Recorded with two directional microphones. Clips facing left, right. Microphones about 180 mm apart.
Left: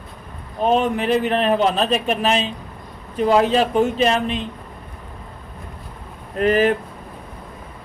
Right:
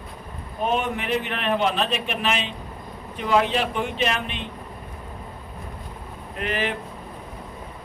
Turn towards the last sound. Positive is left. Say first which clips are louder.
# left 10 dB
turn(degrees=40)  # may be behind; listen again after turning